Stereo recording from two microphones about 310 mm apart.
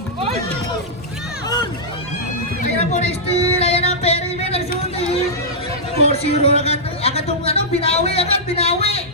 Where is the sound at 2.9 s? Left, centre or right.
Centre.